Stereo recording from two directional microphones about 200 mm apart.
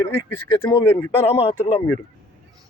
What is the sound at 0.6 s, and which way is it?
Speech, 10° left (ahead or behind).